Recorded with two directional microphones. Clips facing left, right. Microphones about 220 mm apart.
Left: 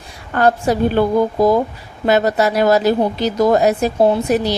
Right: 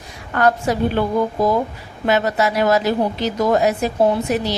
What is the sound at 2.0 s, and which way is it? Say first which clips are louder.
A woman's voice: left 3 dB; 35° left (ahead or behind).